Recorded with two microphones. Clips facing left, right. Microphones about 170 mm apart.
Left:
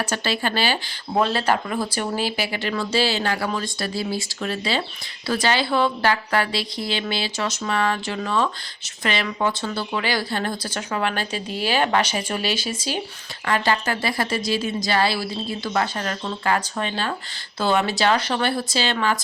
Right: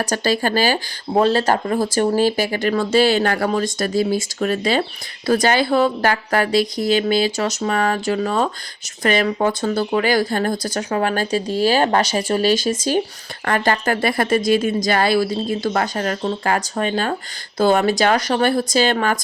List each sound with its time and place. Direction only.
0.0 s speech: 40° right (ahead or behind)